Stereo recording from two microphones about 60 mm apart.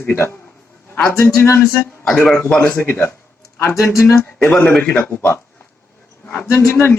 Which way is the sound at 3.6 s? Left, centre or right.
Left.